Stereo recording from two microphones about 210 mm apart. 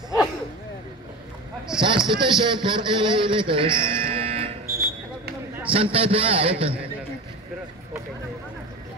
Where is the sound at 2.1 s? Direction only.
20° right (ahead or behind).